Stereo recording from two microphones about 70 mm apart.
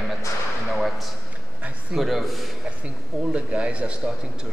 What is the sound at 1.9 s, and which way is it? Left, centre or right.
Speech, centre.